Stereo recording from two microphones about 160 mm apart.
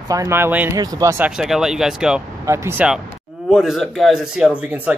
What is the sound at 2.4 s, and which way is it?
Speech, 15° right (ahead or behind).